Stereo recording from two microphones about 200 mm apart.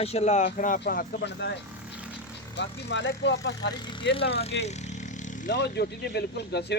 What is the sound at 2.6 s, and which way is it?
Speech, 60° left (ahead or behind).